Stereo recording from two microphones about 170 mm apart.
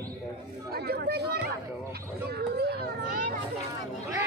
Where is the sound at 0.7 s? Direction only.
65° right (ahead or behind).